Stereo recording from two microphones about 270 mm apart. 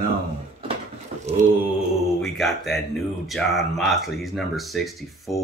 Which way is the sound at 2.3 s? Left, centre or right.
Centre.